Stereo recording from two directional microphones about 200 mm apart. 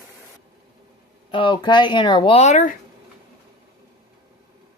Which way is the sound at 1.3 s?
25° left (ahead or behind).